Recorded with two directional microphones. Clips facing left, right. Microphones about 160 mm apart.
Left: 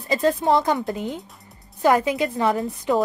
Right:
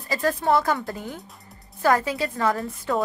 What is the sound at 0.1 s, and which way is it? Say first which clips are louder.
A woman's voice: left 3 dB; 20° left (ahead or behind).